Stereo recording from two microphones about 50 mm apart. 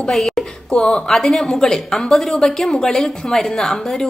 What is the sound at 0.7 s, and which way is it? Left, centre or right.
A woman's voice, centre.